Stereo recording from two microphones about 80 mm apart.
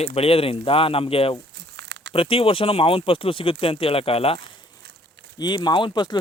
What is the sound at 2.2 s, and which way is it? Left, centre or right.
Speech, left.